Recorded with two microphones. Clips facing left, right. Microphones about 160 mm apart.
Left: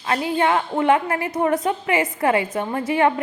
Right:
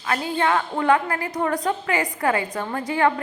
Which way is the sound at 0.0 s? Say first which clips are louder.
Left 3 dB; 25° left (ahead or behind).